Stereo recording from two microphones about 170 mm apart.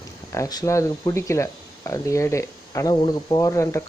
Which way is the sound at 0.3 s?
20° left (ahead or behind).